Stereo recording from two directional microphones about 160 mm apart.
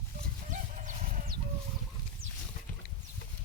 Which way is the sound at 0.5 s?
55° right (ahead or behind).